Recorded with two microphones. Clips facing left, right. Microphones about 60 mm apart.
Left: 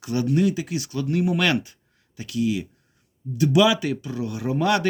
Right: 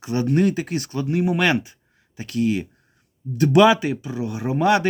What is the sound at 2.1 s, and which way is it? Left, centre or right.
Speech, right.